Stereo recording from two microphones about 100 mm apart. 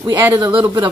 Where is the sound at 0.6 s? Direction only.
40° right (ahead or behind).